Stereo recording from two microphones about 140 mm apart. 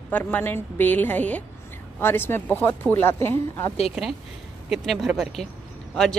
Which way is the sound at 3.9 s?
Centre (ahead or behind).